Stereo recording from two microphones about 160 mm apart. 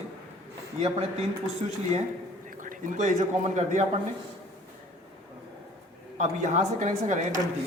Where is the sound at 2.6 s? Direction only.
50° right (ahead or behind).